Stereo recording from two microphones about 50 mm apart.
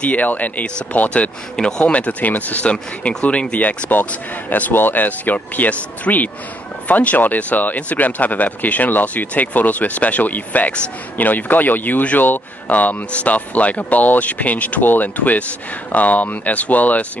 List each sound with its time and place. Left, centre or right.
0.0 s speech: left
1.6 s speech: centre; by 2.7 s left
2.7 s speech: left